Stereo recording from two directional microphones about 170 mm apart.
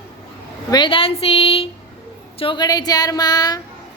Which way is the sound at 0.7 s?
30° left (ahead or behind).